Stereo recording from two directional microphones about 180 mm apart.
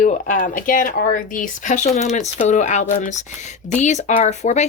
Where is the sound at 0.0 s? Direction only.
45° left (ahead or behind).